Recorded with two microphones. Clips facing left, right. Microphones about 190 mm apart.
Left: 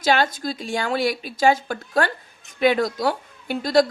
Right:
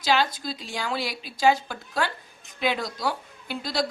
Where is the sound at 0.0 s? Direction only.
50° left (ahead or behind).